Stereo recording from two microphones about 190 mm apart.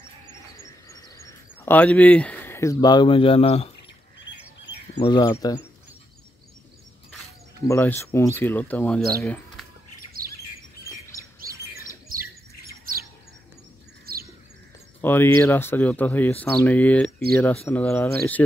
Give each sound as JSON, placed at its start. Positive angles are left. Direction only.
{"t": 0.7, "sound": "a sound", "side_deg": 15}
{"t": 4.9, "sound": "speech", "side_deg": 25}
{"t": 7.6, "sound": "speech", "side_deg": 15}
{"t": 10.2, "sound": "squawk", "side_deg": -50}
{"t": 11.1, "sound": "bird", "side_deg": 15}
{"t": 12.1, "sound": "a sound", "side_deg": -50}
{"t": 14.1, "sound": "bird", "side_deg": -55}
{"t": 15.0, "sound": "speech", "side_deg": 10}